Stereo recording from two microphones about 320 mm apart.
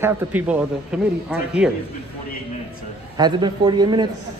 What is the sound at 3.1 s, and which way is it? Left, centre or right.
Speech, centre.